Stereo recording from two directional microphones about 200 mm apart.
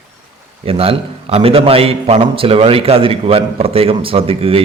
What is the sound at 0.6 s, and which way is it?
Speech, 30° right (ahead or behind).